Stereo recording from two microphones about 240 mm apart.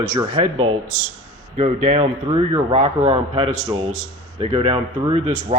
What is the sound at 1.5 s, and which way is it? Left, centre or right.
A man's voice, right.